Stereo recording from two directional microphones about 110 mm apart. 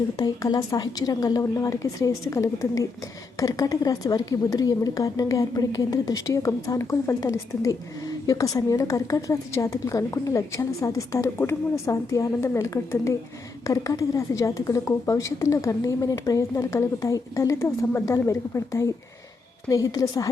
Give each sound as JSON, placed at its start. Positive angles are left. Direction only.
{"t": 0.2, "sound": "a woman's voice", "side_deg": 35}